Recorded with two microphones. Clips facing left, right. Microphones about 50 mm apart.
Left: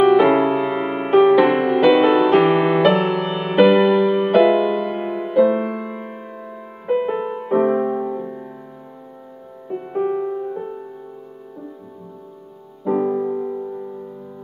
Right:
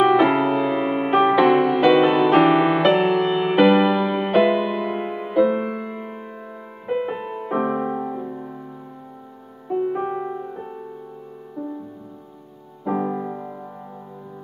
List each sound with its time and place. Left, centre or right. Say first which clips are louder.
0.0 s music: left 3 dB; centre
9.7 s music: left 1 dB; centre
12.8 s music: left 5 dB; centre